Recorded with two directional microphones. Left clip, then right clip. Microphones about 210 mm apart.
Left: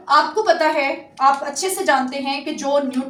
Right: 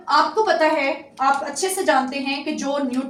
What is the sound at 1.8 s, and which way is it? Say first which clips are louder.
Speech: left 1 dB; 10° right (ahead or behind).